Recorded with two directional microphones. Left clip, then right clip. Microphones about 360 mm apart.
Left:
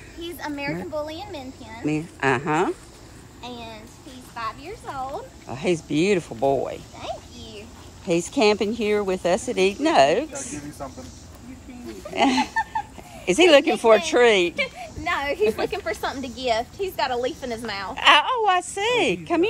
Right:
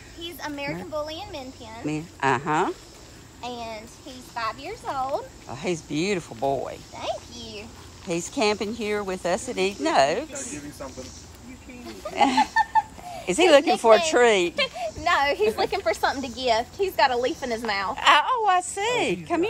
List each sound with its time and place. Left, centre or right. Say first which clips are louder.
0.2 s speech: left 2 dB; centre
3.4 s a sound: right 3 dB; right
4.4 s speech: right 2 dB; right
5.5 s speech: left 5 dB; centre
8.1 s speech: left 5 dB; centre
12.1 s speech: right 1 dB; centre
14.6 s a sound: right 2 dB; centre
15.5 s a woman's voice: right 2 dB; right
17.9 s speech: left 3 dB; centre